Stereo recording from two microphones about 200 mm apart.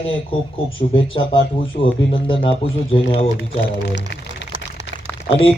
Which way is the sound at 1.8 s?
25° left (ahead or behind).